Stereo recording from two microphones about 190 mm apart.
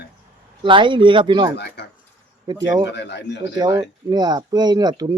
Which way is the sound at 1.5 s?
60° left (ahead or behind).